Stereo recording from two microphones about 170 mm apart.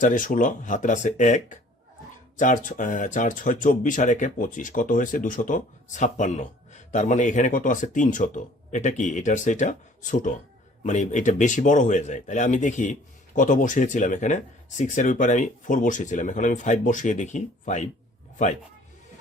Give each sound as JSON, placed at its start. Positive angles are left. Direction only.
{"t": 0.0, "sound": "speech", "side_deg": 50}